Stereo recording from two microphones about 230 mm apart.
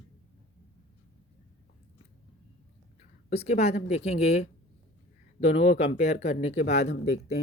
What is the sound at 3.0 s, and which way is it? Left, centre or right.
Speech, left.